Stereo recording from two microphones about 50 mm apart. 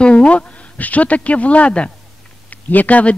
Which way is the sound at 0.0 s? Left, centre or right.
Left.